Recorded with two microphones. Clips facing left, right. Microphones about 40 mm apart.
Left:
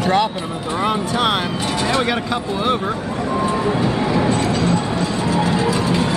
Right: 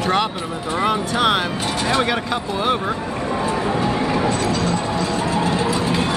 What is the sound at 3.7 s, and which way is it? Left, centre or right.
Train, right.